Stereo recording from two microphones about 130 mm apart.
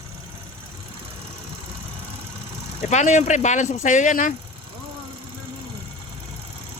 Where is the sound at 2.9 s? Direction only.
65° left (ahead or behind); by 4.3 s 80° left.